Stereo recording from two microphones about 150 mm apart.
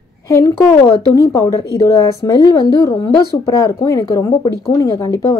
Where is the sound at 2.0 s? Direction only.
25° left (ahead or behind).